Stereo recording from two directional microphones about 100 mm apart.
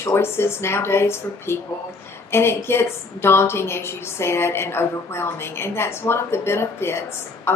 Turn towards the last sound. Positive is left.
turn(degrees=25)  # may be behind; listen again after turning